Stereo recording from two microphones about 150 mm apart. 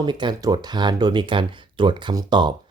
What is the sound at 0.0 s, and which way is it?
Speech, 30° right (ahead or behind).